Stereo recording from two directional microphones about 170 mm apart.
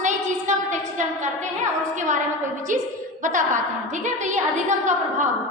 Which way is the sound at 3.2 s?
50° right (ahead or behind).